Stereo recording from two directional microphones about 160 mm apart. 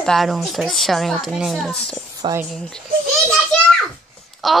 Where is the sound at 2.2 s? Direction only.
30° right (ahead or behind).